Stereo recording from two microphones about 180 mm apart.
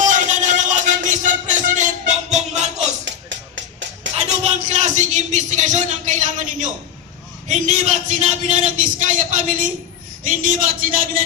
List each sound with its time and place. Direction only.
0.0 s music: 45° right (ahead or behind)
3.0 s music: 90° right
4.4 s a sound: 40° right (ahead or behind)
7.4 s a man's voice: 40° right (ahead or behind)